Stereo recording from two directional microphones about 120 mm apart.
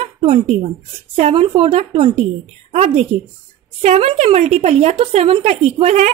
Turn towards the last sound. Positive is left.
turn(degrees=-60)  # may be behind; listen again after turning